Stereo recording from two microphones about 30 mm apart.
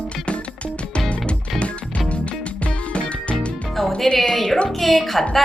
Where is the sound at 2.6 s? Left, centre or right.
Left.